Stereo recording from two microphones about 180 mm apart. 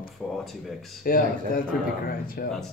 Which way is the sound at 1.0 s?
50° left (ahead or behind).